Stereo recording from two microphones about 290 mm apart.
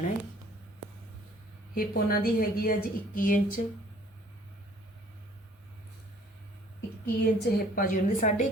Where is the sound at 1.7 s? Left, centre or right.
Left.